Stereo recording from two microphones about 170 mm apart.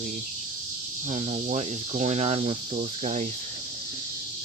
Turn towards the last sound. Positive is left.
turn(degrees=-40)  # may be behind; listen again after turning